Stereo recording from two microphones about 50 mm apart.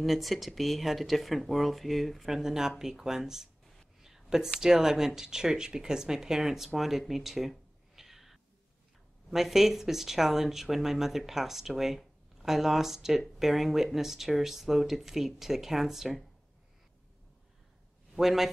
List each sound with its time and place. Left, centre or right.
0.0 s speech: centre
6.7 s a sound: centre
9.3 s speech: centre
18.1 s a man's voice: centre